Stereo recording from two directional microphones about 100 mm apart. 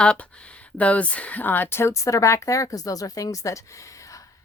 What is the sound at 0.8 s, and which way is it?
Speech, 15° left (ahead or behind).